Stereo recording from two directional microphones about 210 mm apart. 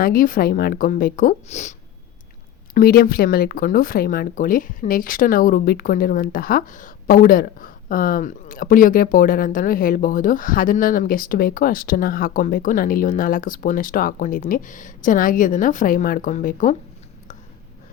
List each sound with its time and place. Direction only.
0.0 s speech: 45° left (ahead or behind)
2.7 s speech: 45° left (ahead or behind)